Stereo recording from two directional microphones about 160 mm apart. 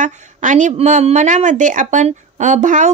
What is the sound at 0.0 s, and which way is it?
A woman's voice, 50° right (ahead or behind).